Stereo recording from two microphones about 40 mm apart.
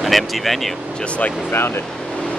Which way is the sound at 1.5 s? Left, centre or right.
Left.